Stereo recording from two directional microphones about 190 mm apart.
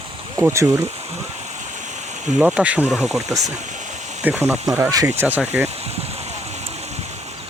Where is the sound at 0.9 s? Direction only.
35° right (ahead or behind).